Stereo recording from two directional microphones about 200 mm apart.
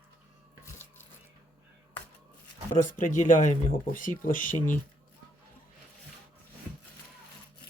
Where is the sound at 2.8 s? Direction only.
40° left (ahead or behind).